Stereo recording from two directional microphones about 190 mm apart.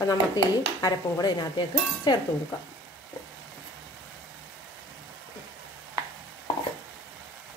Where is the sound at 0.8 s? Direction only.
20° left (ahead or behind).